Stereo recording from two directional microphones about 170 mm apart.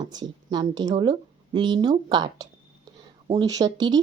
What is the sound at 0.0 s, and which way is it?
A woman's voice, 25° right (ahead or behind).